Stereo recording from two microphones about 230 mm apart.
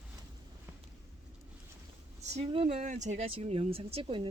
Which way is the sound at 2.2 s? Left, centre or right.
Right.